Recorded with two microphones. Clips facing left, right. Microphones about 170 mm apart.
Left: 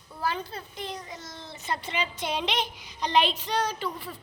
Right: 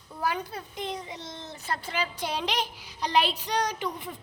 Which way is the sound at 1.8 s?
10° right (ahead or behind).